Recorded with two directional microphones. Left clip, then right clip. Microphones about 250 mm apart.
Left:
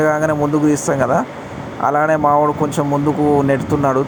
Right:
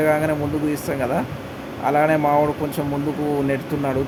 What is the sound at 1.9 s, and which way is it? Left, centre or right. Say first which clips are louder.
Speech: left 3 dB; centre.